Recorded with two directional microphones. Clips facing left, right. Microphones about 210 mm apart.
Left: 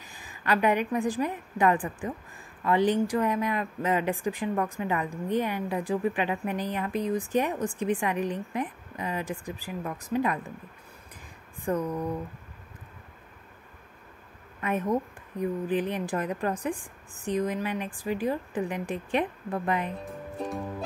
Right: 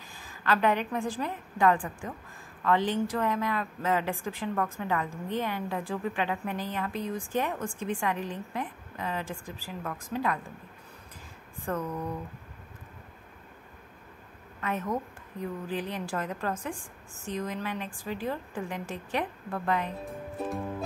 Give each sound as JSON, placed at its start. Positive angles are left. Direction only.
{"t": 0.0, "sound": "a woman's voice", "side_deg": 15}
{"t": 11.6, "sound": "a woman's voice", "side_deg": 15}
{"t": 14.6, "sound": "a woman's voice", "side_deg": 20}
{"t": 20.3, "sound": "music", "side_deg": 0}